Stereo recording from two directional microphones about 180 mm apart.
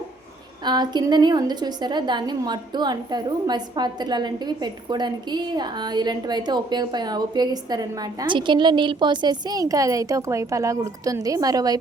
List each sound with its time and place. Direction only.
0.6 s a woman's voice: 25° right (ahead or behind)